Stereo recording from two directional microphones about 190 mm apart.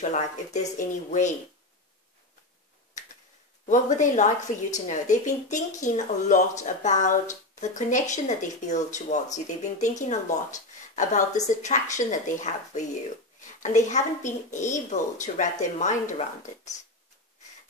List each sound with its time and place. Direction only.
0.0 s speech: 40° left (ahead or behind)
3.6 s speech: 40° left (ahead or behind)